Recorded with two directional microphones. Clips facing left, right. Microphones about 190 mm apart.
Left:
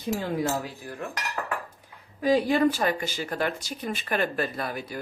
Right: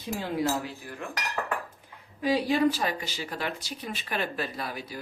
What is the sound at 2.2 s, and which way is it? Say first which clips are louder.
Speech: left 3 dB; 50° left (ahead or behind).